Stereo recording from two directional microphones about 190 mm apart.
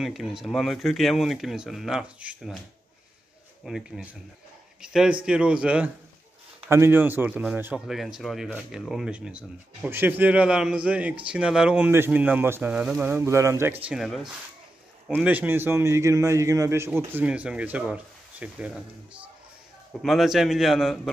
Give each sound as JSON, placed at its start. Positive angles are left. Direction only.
{"t": 0.0, "sound": "speech", "side_deg": 0}
{"t": 3.6, "sound": "a man's voice", "side_deg": -5}
{"t": 20.0, "sound": "speech", "side_deg": 0}